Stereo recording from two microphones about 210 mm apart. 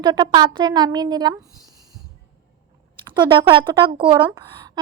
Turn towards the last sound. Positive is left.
turn(degrees=-20)  # may be behind; listen again after turning